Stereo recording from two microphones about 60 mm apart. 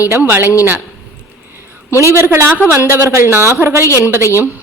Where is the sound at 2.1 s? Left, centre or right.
Right.